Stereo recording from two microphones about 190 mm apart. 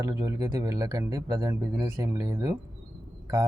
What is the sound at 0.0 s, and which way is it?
Speech, 20° right (ahead or behind).